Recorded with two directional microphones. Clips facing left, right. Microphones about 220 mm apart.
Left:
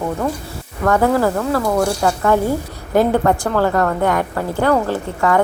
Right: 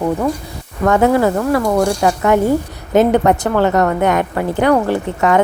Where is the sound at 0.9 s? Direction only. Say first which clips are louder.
Right 3 dB; 20° right (ahead or behind).